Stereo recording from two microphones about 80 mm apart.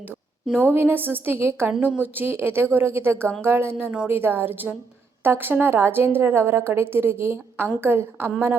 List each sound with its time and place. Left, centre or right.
0.7 s a woman's voice: right